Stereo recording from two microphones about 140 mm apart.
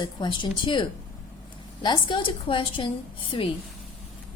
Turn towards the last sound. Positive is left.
turn(degrees=40)  # may be behind; listen again after turning